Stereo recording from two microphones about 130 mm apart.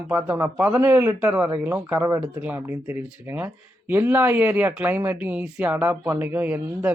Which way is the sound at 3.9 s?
15° right (ahead or behind).